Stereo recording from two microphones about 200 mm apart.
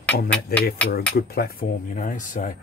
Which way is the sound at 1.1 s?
50° left (ahead or behind).